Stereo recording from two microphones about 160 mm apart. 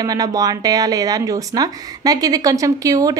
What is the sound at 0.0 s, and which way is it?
Speech, 25° right (ahead or behind).